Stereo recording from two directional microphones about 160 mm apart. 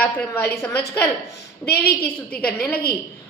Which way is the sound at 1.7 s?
85° left.